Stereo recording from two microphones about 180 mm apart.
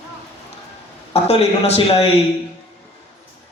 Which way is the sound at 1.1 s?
35° left (ahead or behind).